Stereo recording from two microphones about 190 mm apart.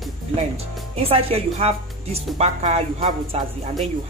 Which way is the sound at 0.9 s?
30° right (ahead or behind).